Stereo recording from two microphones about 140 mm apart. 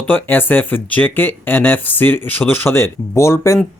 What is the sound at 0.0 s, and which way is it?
Speech, 15° left (ahead or behind).